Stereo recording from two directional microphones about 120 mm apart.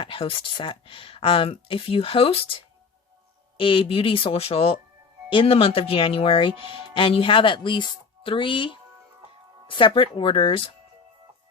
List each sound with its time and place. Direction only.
0.0 s speech: 50° left (ahead or behind)
3.6 s speech: 50° left (ahead or behind)